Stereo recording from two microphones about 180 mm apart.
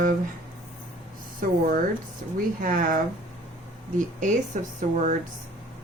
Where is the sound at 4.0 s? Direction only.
45° right (ahead or behind).